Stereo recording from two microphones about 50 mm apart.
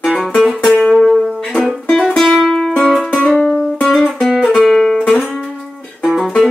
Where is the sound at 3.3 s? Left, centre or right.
Centre.